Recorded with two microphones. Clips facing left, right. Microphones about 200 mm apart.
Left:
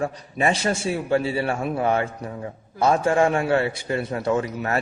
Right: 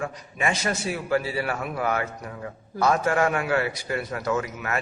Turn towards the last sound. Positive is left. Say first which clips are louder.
# left 4 dB
turn(degrees=30)  # may be behind; listen again after turning